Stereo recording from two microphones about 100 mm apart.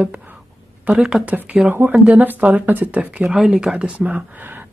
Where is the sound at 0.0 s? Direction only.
15° right (ahead or behind).